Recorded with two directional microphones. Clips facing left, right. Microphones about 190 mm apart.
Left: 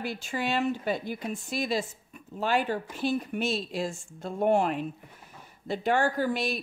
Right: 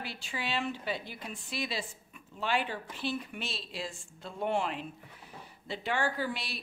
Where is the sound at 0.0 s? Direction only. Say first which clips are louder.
Left 7 dB; 45° left (ahead or behind).